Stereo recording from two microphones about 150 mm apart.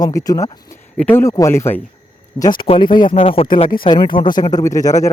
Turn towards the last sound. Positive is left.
turn(degrees=20)  # may be behind; listen again after turning